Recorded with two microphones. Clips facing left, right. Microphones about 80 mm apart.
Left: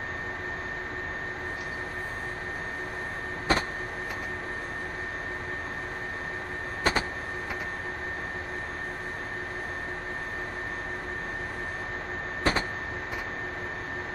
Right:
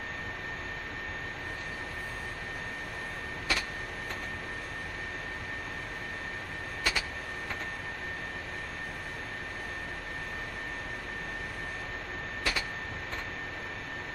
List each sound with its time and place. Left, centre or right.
3.5 s vehicle: left
6.8 s vehicle: left
12.5 s printer: left